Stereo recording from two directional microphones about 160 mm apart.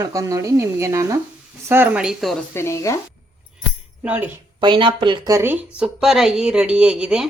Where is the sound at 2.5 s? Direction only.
20° left (ahead or behind).